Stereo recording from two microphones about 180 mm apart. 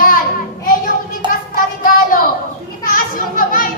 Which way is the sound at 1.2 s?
25° right (ahead or behind).